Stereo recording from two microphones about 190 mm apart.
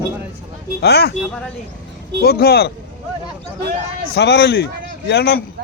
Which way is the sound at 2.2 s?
55° left (ahead or behind).